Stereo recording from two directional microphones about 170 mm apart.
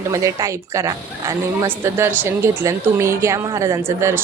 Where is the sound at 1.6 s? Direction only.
15° right (ahead or behind).